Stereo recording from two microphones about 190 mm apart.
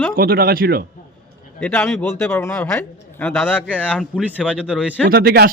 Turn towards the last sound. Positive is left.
turn(degrees=-55)  # may be behind; listen again after turning